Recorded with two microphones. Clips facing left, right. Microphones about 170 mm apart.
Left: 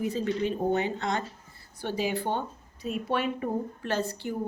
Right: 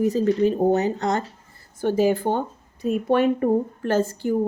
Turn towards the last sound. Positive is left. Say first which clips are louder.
# right 8 dB
turn(degrees=-45)  # may be behind; listen again after turning